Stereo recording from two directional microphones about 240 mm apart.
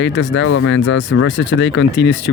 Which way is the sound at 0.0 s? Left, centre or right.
Left.